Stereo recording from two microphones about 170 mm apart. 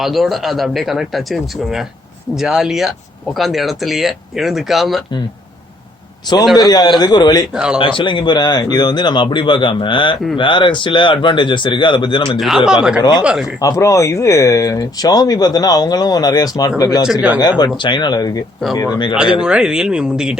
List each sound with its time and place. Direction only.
0.0 s speech: centre (ahead or behind)
6.3 s speech: 25° left (ahead or behind)
7.5 s speech: 5° right (ahead or behind)
7.8 s speech: 30° left (ahead or behind)
12.4 s speech: centre (ahead or behind)
13.0 s speech: 25° left (ahead or behind)
19.4 s speech: 5° right (ahead or behind)